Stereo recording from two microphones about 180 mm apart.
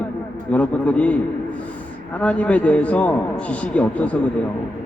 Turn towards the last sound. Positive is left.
turn(degrees=5)  # may be behind; listen again after turning